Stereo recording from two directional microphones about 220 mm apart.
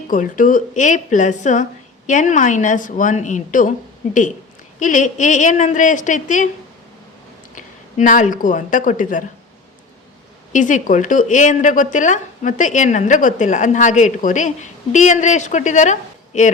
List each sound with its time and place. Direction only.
0.1 s a woman's voice: 35° left (ahead or behind)
4.8 s a woman's voice: 35° left (ahead or behind)
7.5 s a woman's voice: 35° left (ahead or behind)
10.5 s a woman's voice: 35° left (ahead or behind)